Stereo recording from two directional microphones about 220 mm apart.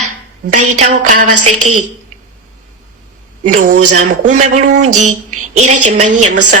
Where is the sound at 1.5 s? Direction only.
90° right.